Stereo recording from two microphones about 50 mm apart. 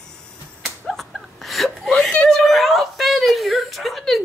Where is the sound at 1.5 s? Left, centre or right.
Centre.